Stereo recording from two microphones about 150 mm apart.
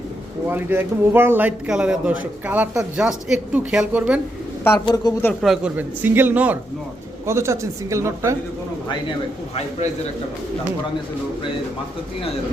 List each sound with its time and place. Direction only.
0.4 s a man's voice: 15° right (ahead or behind)
5.0 s a man's voice: 25° left (ahead or behind)
5.4 s a man's voice: centre (ahead or behind)
5.7 s a man's voice: 10° right (ahead or behind)